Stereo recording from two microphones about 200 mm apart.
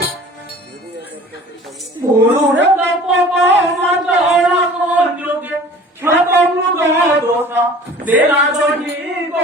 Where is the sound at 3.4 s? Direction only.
60° right (ahead or behind).